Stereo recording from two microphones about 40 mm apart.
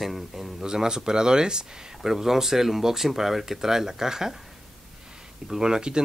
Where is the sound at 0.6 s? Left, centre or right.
Centre.